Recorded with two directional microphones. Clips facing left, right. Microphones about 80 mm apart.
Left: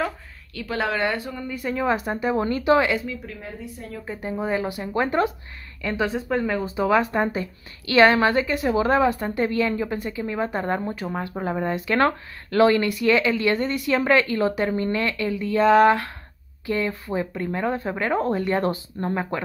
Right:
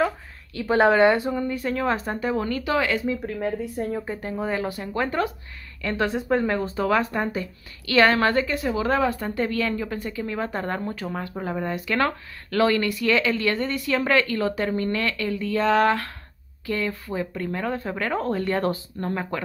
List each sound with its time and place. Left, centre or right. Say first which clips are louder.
0.7 s speech: right 7 dB; right
1.5 s speech: left 5 dB; centre
2.3 s speech: left 6 dB; left
3.3 s speech: right 9 dB; right
4.2 s speech: left 6 dB; centre
5.9 s speech: right 1 dB; centre
6.8 s speech: left 4 dB; centre